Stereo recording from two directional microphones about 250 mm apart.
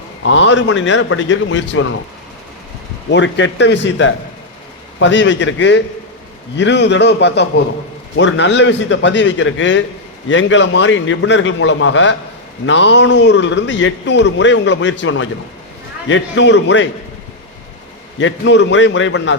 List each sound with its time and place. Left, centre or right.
0.3 s a man's voice: left
3.1 s a man's voice: left
18.2 s a man's voice: left